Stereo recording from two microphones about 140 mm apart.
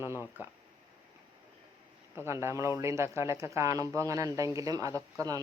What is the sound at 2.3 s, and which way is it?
Speech, 20° right (ahead or behind).